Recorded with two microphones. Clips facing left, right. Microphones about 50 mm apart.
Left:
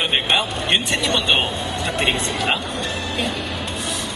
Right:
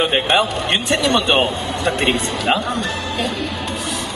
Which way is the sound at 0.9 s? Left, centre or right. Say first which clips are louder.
Right 4 dB; right.